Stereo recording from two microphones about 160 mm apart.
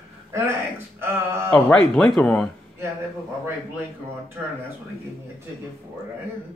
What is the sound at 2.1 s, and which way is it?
Speech, 5° left (ahead or behind).